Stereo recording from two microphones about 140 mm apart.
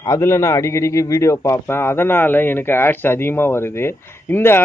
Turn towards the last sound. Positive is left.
turn(degrees=15)  # may be behind; listen again after turning